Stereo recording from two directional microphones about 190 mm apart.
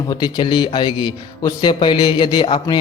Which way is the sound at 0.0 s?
20° left (ahead or behind).